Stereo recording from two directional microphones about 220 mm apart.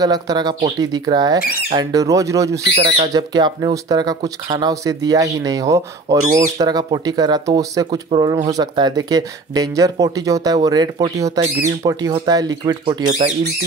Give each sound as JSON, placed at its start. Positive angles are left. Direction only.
{"t": 0.0, "sound": "speech", "side_deg": -15}
{"t": 1.4, "sound": "speech", "side_deg": 45}
{"t": 1.7, "sound": "speech", "side_deg": -15}
{"t": 2.7, "sound": "speech", "side_deg": -25}
{"t": 6.2, "sound": "speech", "side_deg": -30}
{"t": 6.6, "sound": "speech", "side_deg": -20}